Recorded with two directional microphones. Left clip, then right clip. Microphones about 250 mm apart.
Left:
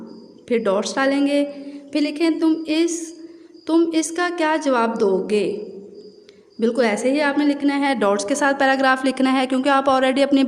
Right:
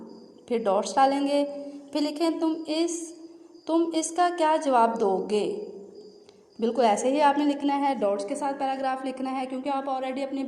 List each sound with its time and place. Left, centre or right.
0.4 s a woman's voice: left
6.6 s a woman's voice: left